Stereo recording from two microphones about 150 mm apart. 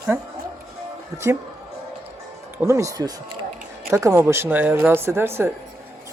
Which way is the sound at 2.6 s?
20° right (ahead or behind).